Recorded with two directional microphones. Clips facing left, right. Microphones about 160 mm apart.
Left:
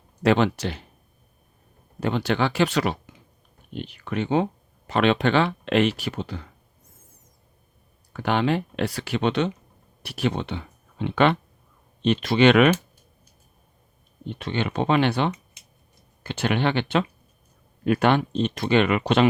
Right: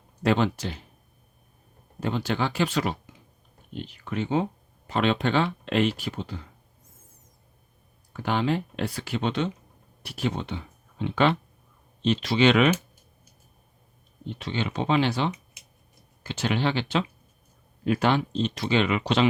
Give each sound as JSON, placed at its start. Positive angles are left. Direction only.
{"t": 0.2, "sound": "speech", "side_deg": 75}
{"t": 2.0, "sound": "speech", "side_deg": 75}
{"t": 8.1, "sound": "speech", "side_deg": 70}
{"t": 14.3, "sound": "speech", "side_deg": 55}